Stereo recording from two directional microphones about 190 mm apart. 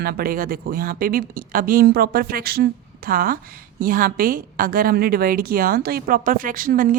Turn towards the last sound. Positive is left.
turn(degrees=-45)  # may be behind; listen again after turning